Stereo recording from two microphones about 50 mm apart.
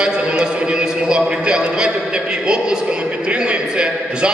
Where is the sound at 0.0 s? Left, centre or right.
Centre.